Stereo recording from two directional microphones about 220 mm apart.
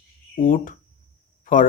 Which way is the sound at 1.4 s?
35° left (ahead or behind).